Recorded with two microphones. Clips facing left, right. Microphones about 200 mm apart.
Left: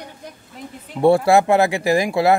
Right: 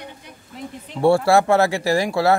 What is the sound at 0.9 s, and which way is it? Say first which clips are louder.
Speech: left 2 dB; 20° left (ahead or behind).